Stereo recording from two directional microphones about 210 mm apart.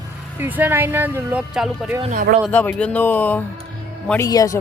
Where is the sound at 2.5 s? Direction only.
5° left (ahead or behind).